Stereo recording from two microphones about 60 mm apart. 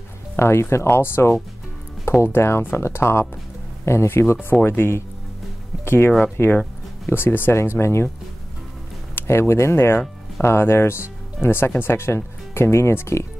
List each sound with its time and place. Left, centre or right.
0.4 s speech: left
9.1 s speech: left